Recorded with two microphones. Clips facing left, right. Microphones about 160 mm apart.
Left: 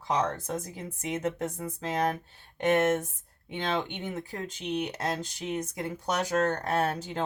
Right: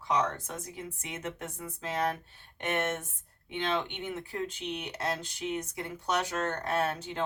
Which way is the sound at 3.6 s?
40° left (ahead or behind).